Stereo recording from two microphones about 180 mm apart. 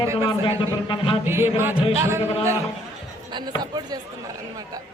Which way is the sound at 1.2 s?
15° right (ahead or behind).